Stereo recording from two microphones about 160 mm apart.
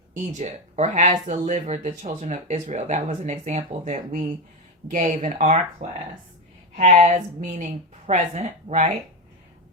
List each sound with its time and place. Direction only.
0.1 s speech: 50° right (ahead or behind)